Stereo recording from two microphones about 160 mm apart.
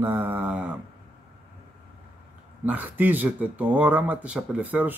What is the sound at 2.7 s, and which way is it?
Speech, 10° right (ahead or behind).